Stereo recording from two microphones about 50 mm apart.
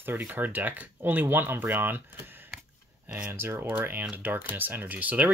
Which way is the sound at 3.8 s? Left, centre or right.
Right.